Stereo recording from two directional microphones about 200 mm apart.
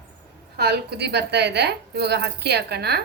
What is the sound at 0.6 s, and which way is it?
A woman's voice, 55° right (ahead or behind).